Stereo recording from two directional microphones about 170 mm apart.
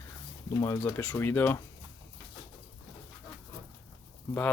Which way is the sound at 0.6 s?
15° left (ahead or behind).